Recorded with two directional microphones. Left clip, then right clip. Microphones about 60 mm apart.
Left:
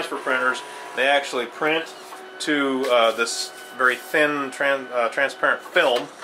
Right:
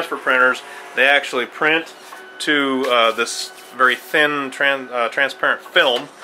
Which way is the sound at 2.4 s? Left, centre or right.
Right.